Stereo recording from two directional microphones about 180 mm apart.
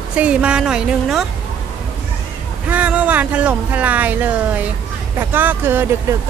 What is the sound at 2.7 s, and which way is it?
Speech, 10° right (ahead or behind).